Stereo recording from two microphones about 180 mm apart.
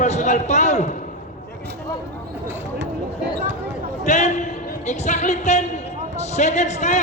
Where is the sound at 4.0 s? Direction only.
40° left (ahead or behind).